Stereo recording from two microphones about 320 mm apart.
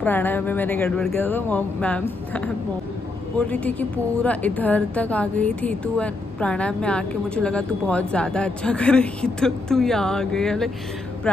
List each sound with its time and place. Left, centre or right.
0.0 s a woman's voice: centre